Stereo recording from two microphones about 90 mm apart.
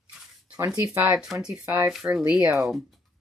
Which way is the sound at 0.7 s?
25° right (ahead or behind).